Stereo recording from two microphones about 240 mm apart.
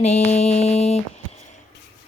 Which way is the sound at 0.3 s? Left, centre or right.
Left.